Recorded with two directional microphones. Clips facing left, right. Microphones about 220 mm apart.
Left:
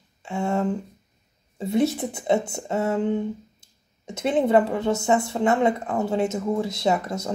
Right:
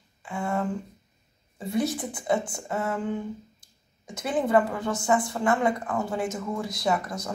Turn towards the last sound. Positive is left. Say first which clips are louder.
# left 4 dB
turn(degrees=25)  # may be behind; listen again after turning